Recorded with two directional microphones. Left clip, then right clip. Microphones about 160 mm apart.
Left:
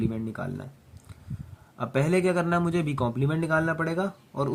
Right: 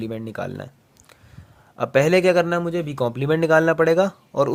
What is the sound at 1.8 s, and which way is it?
Speech, 50° right (ahead or behind).